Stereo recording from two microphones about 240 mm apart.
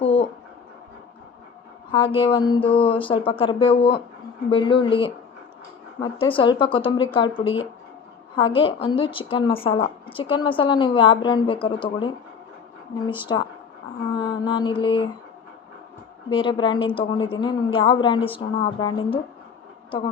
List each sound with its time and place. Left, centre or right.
0.0 s a sound: left
1.9 s a woman's voice: left
13.3 s mantra: centre
16.3 s a woman's voice: centre